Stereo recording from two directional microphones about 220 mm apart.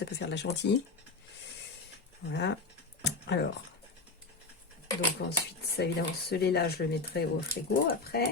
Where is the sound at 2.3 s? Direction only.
50° left (ahead or behind).